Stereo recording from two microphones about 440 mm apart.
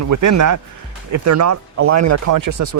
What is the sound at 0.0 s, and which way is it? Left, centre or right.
Speech, right.